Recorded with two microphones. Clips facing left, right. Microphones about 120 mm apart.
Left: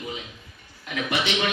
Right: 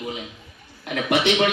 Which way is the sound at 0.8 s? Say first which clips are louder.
Right 6 dB; 55° right (ahead or behind).